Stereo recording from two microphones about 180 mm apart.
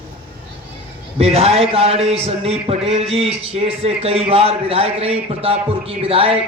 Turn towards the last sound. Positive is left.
turn(degrees=-30)  # may be behind; listen again after turning